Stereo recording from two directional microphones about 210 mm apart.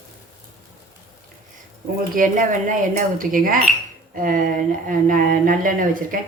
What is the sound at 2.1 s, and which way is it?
Speech, 40° right (ahead or behind).